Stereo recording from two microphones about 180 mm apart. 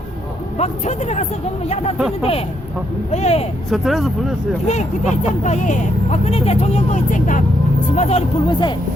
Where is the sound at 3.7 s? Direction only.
Centre (ahead or behind).